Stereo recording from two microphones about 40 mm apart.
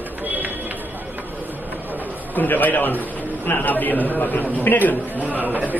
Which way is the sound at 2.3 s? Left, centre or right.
Left.